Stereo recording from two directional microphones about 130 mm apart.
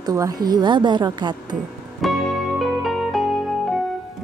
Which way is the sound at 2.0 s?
Centre (ahead or behind).